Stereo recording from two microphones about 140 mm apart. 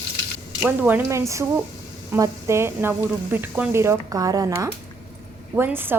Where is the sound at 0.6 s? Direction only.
15° right (ahead or behind).